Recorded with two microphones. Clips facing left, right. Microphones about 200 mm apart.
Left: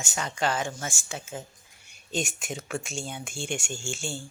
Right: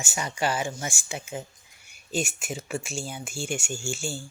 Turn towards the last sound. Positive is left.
turn(degrees=-5)  # may be behind; listen again after turning